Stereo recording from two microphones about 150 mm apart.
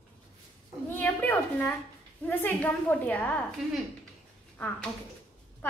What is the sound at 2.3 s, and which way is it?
A woman's voice, 10° left (ahead or behind).